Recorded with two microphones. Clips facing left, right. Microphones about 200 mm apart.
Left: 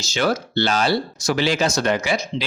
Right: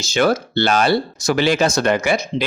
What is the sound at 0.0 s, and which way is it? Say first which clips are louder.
A man's voice: right 4 dB; 55° right (ahead or behind).